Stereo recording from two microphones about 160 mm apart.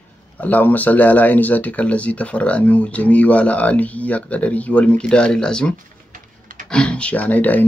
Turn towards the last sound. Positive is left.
turn(degrees=10)  # may be behind; listen again after turning